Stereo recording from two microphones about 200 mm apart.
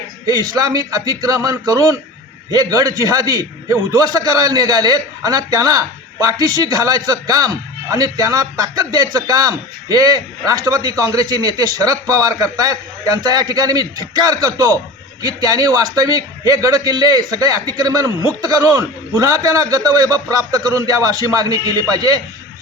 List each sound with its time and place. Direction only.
0.3 s a man's voice: 20° right (ahead or behind)